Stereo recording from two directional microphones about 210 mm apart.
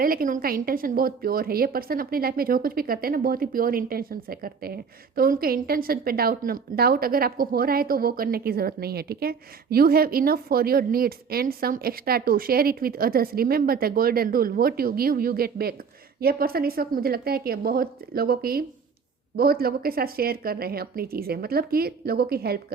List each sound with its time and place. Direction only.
0.0 s a woman's voice: 45° right (ahead or behind)